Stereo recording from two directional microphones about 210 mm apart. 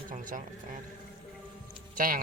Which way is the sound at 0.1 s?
40° right (ahead or behind).